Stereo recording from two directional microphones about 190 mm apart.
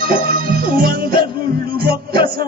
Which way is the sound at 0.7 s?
50° right (ahead or behind).